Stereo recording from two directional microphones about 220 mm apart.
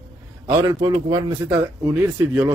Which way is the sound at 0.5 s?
20° right (ahead or behind).